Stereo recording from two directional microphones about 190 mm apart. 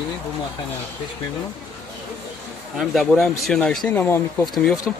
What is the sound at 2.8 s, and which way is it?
Speech, centre (ahead or behind).